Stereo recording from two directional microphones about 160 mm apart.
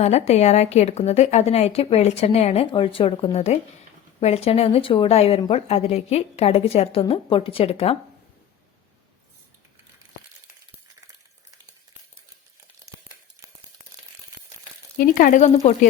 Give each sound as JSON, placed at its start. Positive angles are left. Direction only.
{"t": 0.0, "sound": "a woman's voice", "side_deg": 45}
{"t": 14.9, "sound": "frying", "side_deg": 60}